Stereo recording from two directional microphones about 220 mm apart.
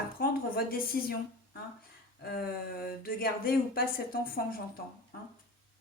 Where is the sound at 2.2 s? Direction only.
45° left (ahead or behind).